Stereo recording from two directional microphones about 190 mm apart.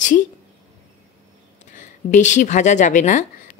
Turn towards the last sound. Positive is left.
turn(degrees=40)  # may be behind; listen again after turning